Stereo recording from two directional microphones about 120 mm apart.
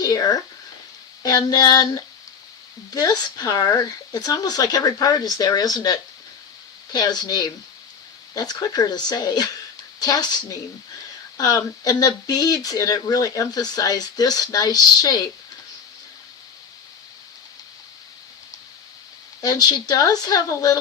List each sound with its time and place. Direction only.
0.0 s speech: 30° left (ahead or behind)
19.4 s speech: 35° left (ahead or behind)